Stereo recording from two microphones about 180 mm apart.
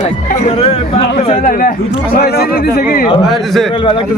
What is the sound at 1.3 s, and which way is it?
Speech, 50° left (ahead or behind).